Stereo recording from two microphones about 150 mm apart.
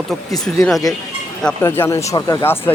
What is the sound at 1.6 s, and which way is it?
Speech, 15° left (ahead or behind).